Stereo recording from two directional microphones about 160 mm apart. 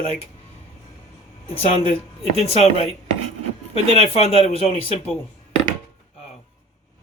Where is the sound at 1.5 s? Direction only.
35° left (ahead or behind).